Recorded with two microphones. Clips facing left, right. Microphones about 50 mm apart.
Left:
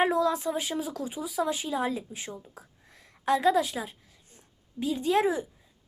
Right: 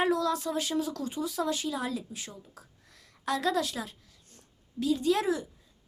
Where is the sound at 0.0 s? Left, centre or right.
Left.